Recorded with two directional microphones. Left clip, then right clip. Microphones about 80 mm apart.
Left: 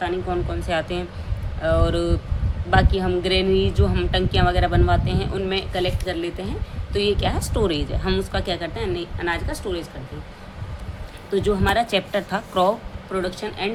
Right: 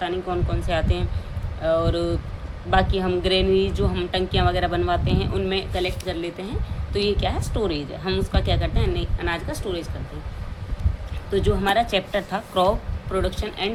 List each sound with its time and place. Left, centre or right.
0.0 s a woman's voice: centre
2.6 s speech: centre
3.5 s a woman's voice: centre
3.8 s speech: left
4.3 s speech: centre
5.5 s speech: left
6.9 s speech: left
7.5 s speech: left
8.3 s speech: centre
11.3 s a woman's voice: centre
13.1 s speech: centre